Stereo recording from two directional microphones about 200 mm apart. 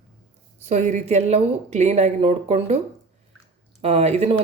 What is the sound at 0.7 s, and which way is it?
Speech, 35° right (ahead or behind).